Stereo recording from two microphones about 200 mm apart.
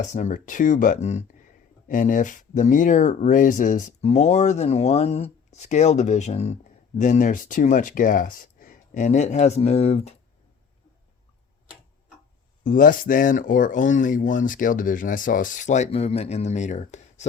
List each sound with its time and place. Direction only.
0.0 s speech: 40° left (ahead or behind)
12.6 s speech: 45° left (ahead or behind)